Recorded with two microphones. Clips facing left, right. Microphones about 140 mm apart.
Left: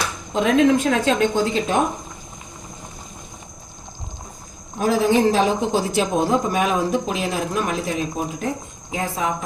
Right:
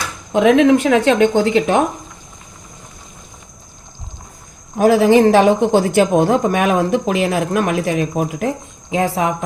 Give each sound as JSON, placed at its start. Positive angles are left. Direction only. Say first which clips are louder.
{"t": 0.3, "sound": "a man's voice", "louder": "right 5 dB", "side_deg": -70}
{"t": 4.8, "sound": "a man's voice", "louder": "right 7 dB", "side_deg": -70}
{"t": 8.9, "sound": "speech", "louder": "right 7 dB", "side_deg": -85}